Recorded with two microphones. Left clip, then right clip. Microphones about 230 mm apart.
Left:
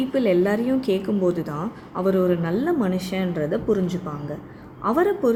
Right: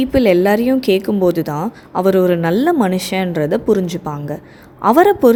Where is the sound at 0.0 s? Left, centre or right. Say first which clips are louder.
Right 8 dB; right.